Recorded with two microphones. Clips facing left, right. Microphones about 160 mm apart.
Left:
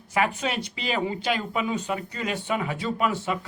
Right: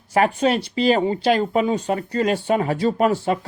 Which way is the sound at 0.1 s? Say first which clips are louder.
Right 8 dB; 35° right (ahead or behind).